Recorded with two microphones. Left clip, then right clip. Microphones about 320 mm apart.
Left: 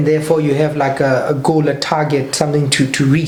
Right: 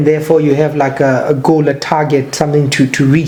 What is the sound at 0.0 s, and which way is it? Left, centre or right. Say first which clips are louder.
A man's voice: right 4 dB; right.